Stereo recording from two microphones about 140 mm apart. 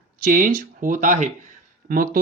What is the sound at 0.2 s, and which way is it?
Speech, 80° right.